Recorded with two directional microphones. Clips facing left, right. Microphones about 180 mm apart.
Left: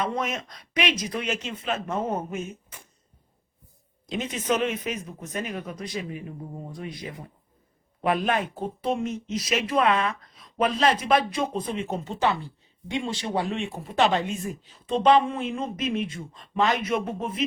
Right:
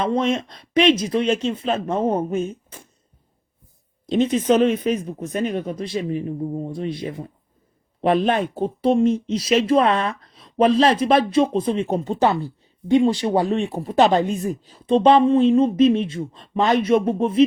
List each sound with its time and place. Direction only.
0.0 s speech: 30° right (ahead or behind)
4.0 s speech: 30° right (ahead or behind)